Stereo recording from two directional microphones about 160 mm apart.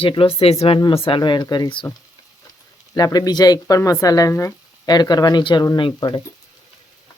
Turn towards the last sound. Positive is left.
turn(degrees=30)  # may be behind; listen again after turning